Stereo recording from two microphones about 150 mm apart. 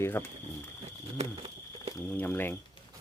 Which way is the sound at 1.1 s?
40° right (ahead or behind).